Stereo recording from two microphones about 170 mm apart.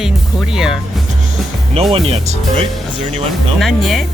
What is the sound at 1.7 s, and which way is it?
Speech, 35° right (ahead or behind).